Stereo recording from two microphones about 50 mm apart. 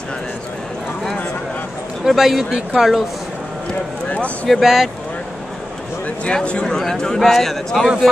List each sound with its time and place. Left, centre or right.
2.0 s a man's voice: centre
4.5 s speech: centre
6.3 s a man's voice: centre